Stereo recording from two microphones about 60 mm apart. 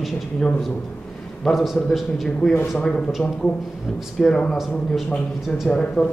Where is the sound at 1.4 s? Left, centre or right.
Centre.